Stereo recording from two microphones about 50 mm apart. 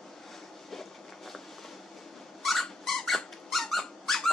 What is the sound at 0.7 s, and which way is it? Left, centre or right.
Train, centre.